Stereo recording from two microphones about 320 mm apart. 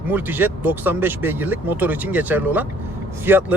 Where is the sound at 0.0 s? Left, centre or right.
Centre.